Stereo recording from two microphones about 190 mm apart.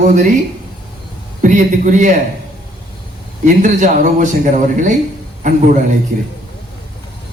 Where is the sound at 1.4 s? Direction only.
40° right (ahead or behind).